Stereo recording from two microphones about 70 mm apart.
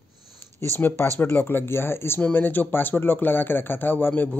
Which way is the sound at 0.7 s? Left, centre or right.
Left.